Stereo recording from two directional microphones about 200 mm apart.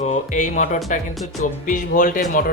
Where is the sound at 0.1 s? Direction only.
40° left (ahead or behind).